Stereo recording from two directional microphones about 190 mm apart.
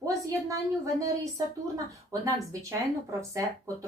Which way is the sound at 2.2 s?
15° right (ahead or behind).